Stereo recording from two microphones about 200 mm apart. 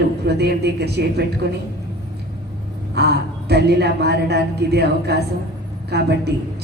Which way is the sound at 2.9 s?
55° right (ahead or behind).